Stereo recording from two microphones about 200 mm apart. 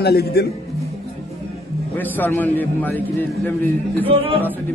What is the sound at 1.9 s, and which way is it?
A man's voice, 10° left (ahead or behind).